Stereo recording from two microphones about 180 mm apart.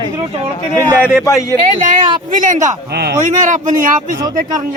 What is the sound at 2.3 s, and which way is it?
Speech, 45° right (ahead or behind).